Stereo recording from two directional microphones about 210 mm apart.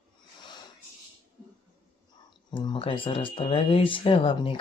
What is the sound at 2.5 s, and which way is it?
Speech, 20° left (ahead or behind).